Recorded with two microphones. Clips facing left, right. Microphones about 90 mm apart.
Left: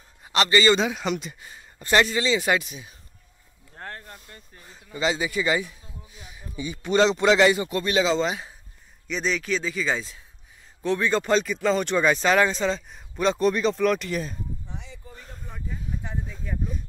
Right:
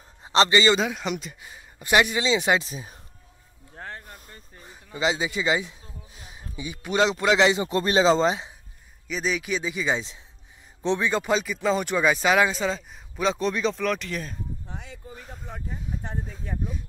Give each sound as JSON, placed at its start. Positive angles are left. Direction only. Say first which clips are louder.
{"t": 0.2, "sound": "a man's voice", "louder": "right 1 dB", "side_deg": -25}
{"t": 0.7, "sound": "speech", "louder": "left 1 dB", "side_deg": 0}
{"t": 2.7, "sound": "speech", "louder": "right 4 dB", "side_deg": -35}
{"t": 3.7, "sound": "speech", "louder": "even", "side_deg": 0}
{"t": 4.6, "sound": "speech", "louder": "even", "side_deg": -15}
{"t": 9.0, "sound": "speech", "louder": "left 1 dB", "side_deg": -5}
{"t": 11.1, "sound": "speech", "louder": "left 2 dB", "side_deg": -10}
{"t": 15.5, "sound": "a sound", "louder": "even", "side_deg": -40}